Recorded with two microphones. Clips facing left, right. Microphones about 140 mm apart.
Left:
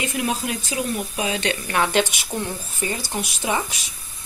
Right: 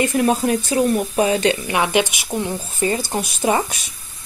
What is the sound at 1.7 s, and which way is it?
Speech, 15° right (ahead or behind).